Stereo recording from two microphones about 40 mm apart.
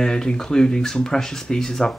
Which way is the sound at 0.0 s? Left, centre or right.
Centre.